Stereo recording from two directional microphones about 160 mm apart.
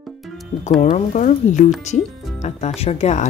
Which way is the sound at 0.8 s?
50° left (ahead or behind).